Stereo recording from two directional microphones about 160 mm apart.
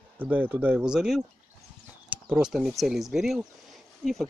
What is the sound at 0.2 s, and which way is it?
Speech, 10° right (ahead or behind).